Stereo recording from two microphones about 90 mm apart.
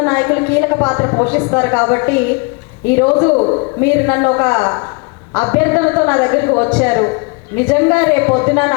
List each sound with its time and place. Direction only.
0.0 s a woman's voice: 25° left (ahead or behind)